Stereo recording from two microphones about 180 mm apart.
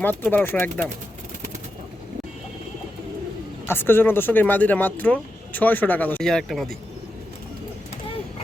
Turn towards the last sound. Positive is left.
turn(degrees=0)  # may be behind; listen again after turning